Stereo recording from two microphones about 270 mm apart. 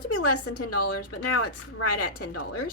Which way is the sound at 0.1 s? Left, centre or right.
Left.